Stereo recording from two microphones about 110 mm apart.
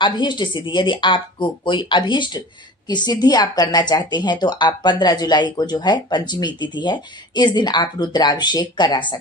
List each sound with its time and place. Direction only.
0.0 s a woman's voice: 45° left (ahead or behind)